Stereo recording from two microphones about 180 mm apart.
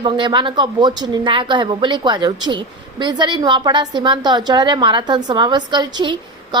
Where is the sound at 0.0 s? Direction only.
25° right (ahead or behind).